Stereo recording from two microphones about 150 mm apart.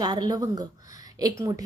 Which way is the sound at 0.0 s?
30° right (ahead or behind).